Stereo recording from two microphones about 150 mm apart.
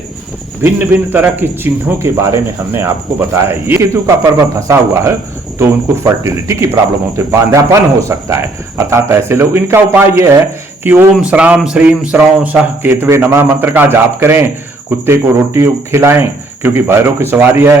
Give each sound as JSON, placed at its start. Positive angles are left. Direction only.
{"t": 0.6, "sound": "speech", "side_deg": -15}